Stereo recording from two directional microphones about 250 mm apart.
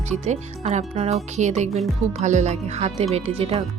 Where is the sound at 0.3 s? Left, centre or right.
Right.